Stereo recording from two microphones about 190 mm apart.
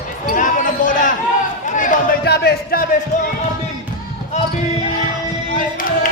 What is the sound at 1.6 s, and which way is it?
Chatter, 45° left (ahead or behind).